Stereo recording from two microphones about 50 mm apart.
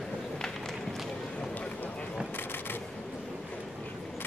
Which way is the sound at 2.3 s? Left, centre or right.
Left.